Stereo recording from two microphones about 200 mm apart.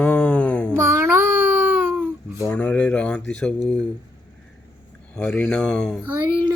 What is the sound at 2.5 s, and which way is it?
Speech, 5° left (ahead or behind).